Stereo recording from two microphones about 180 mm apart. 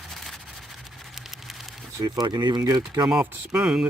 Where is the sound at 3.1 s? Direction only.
5° right (ahead or behind).